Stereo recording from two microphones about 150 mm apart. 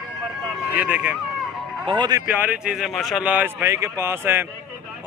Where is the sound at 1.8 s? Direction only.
30° right (ahead or behind).